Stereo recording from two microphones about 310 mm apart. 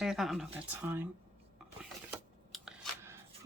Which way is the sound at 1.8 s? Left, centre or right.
Centre.